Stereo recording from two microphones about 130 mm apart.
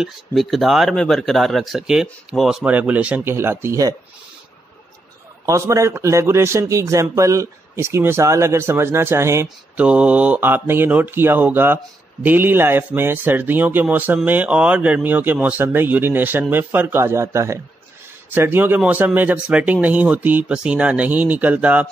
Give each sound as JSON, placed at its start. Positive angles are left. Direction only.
{"t": 0.0, "sound": "speech", "side_deg": 0}
{"t": 5.4, "sound": "a man's voice", "side_deg": -25}